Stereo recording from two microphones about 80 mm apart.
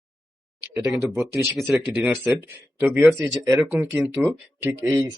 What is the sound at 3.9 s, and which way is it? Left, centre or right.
Speech, centre.